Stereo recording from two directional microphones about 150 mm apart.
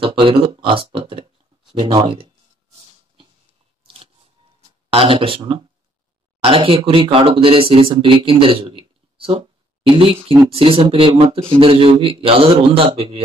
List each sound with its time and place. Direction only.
0.0 s speech: 35° right (ahead or behind)
3.8 s a sound: 40° right (ahead or behind)
4.8 s speech: 35° right (ahead or behind)